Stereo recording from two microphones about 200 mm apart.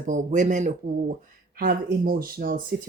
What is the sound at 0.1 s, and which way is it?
Speech, 40° right (ahead or behind).